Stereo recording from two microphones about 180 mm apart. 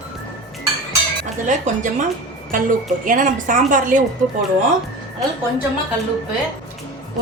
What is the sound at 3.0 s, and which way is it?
A woman's voice, 50° right (ahead or behind).